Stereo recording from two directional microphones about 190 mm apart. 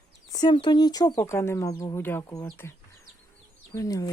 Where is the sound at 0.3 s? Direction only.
25° left (ahead or behind).